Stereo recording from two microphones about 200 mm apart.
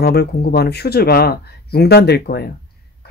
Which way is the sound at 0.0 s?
50° left (ahead or behind).